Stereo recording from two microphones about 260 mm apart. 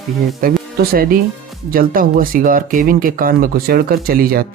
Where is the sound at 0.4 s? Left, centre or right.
Right.